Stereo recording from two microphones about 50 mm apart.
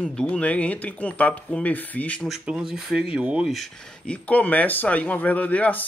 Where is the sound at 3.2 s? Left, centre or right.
Right.